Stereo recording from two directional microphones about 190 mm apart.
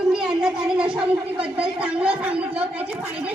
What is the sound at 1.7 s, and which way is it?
A woman's voice, 5° right (ahead or behind).